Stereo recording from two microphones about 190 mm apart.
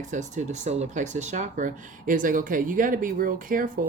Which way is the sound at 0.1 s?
40° right (ahead or behind).